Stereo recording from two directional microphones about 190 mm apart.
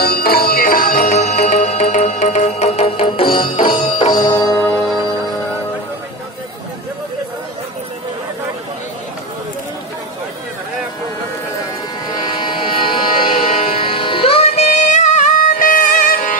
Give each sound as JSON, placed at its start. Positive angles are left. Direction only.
{"t": 0.0, "sound": "music", "side_deg": 55}
{"t": 4.6, "sound": "music", "side_deg": 10}
{"t": 12.3, "sound": "a sound", "side_deg": 25}
{"t": 13.8, "sound": "music", "side_deg": 25}